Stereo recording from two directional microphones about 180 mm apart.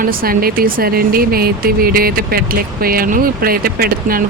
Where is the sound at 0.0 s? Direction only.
55° right (ahead or behind).